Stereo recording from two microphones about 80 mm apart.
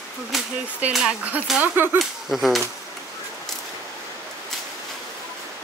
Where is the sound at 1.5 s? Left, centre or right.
Right.